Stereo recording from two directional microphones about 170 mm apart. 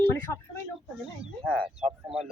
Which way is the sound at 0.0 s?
15° left (ahead or behind).